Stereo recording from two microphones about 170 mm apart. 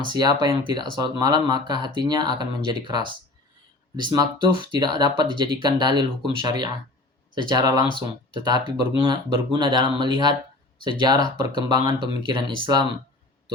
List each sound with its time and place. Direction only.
0.1 s speech: 25° right (ahead or behind)
4.2 s speech: 25° right (ahead or behind)